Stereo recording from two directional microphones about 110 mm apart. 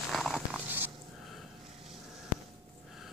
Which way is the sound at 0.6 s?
15° right (ahead or behind).